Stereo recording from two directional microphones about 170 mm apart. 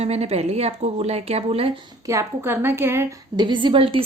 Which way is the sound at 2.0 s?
15° right (ahead or behind).